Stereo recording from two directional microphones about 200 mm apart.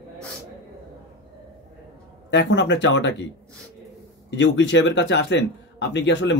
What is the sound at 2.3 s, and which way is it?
Speech, 65° left (ahead or behind).